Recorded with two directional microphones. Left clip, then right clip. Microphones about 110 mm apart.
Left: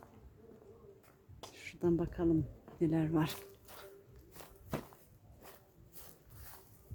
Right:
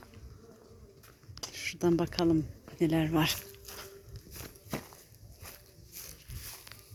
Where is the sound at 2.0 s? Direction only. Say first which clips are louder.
Right 5 dB; 30° right (ahead or behind).